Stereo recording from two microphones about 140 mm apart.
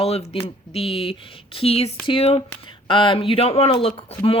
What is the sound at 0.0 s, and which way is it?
A woman's voice, 45° left (ahead or behind).